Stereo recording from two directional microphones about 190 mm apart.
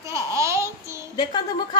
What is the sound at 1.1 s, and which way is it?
Speech, 25° left (ahead or behind).